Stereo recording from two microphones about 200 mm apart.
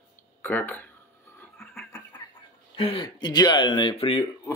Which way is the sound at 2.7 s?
25° left (ahead or behind).